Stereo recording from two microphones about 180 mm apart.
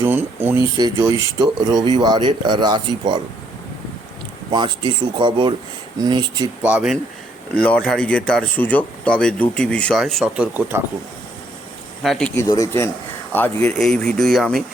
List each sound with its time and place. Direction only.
0.0 s a sound: 10° right (ahead or behind)
0.8 s speech: 20° right (ahead or behind)
4.5 s speech: 25° right (ahead or behind)
6.6 s speech: 5° right (ahead or behind)
7.5 s speech: 5° left (ahead or behind); by 10.8 s 10° right (ahead or behind)
12.0 s speech: 5° left (ahead or behind)
12.4 s speech: 15° left (ahead or behind); by 14.6 s centre (ahead or behind)